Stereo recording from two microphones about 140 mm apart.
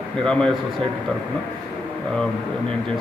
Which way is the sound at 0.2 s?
5° left (ahead or behind).